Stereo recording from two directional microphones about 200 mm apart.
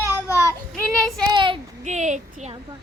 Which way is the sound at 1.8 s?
35° right (ahead or behind).